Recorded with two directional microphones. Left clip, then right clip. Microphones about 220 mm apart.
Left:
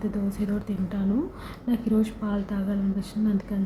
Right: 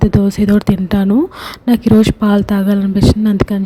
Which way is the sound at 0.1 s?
45° right (ahead or behind).